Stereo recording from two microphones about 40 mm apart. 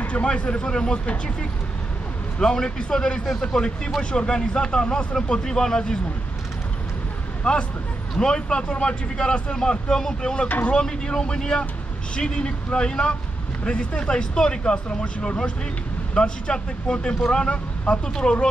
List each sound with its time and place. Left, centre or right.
0.0 s speech: left
7.5 s speech: left